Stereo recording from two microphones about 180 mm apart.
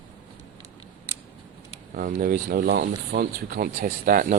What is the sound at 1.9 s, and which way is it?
Speech, 50° right (ahead or behind).